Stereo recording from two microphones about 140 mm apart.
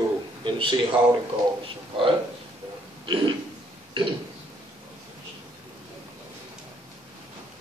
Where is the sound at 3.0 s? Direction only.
35° right (ahead or behind).